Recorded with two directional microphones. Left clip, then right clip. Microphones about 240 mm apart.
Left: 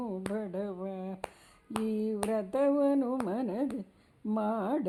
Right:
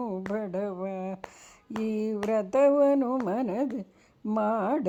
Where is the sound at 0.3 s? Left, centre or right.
Right.